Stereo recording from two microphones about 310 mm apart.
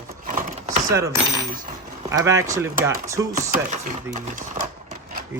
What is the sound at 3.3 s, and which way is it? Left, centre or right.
Speech, right.